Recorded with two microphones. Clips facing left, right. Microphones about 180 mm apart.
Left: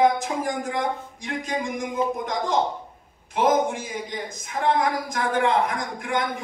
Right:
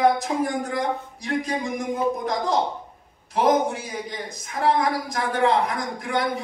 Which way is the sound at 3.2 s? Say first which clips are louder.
Right 1 dB; 35° right (ahead or behind).